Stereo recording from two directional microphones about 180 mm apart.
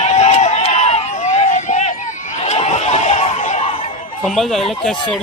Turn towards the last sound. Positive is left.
turn(degrees=0)  # may be behind; listen again after turning